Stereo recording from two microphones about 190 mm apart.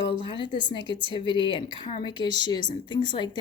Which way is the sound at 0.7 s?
25° right (ahead or behind).